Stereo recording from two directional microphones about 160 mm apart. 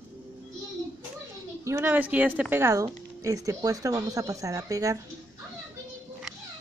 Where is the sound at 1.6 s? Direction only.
15° right (ahead or behind).